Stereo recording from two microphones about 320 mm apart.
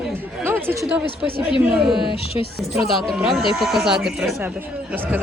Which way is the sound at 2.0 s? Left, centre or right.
Centre.